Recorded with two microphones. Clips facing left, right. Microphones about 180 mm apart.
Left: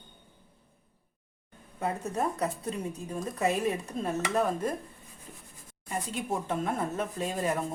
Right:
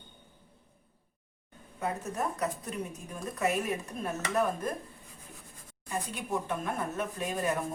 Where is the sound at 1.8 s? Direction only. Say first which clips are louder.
Left 3 dB; 30° left (ahead or behind).